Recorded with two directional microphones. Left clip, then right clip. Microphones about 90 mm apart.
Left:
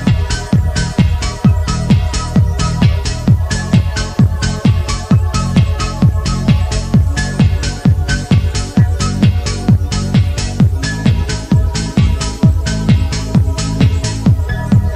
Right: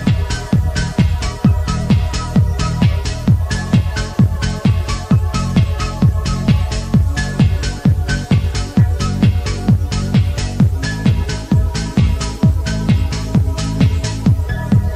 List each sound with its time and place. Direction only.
0.0 s music: 35° right (ahead or behind)